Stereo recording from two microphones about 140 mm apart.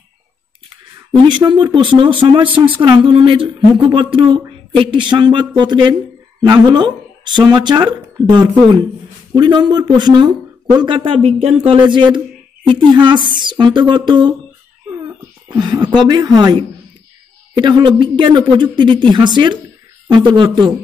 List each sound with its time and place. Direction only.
1.2 s speech: 35° right (ahead or behind)
15.4 s speech: 30° right (ahead or behind)